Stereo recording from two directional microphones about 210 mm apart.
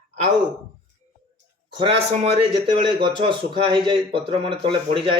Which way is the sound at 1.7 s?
25° right (ahead or behind).